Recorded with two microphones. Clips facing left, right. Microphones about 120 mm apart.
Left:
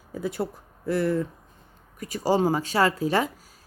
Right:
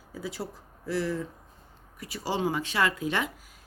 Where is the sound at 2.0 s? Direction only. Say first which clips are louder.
Left 8 dB; 45° left (ahead or behind).